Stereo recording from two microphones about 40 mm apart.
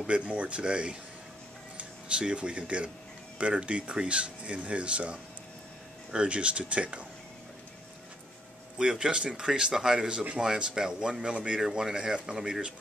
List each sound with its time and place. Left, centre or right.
0.0 s speech: right
1.8 s a sound: right
3.3 s speech: right
8.7 s speech: centre